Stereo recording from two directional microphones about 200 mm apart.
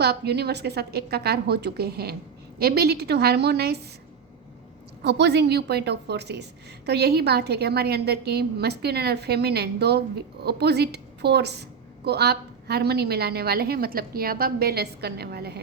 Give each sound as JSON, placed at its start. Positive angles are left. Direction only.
{"t": 0.0, "sound": "a woman's voice", "side_deg": -55}
{"t": 5.0, "sound": "a woman's voice", "side_deg": -55}